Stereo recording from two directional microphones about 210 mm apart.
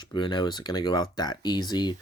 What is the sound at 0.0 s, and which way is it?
Speech, 20° left (ahead or behind).